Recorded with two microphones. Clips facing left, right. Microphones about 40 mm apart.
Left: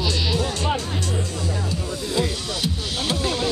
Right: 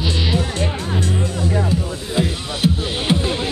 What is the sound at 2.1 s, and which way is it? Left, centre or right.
Music, right.